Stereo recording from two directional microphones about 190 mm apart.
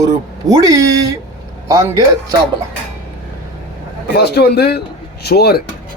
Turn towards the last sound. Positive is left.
turn(degrees=55)  # may be behind; listen again after turning